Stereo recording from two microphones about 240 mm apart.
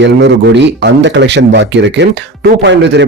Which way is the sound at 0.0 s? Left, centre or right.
Right.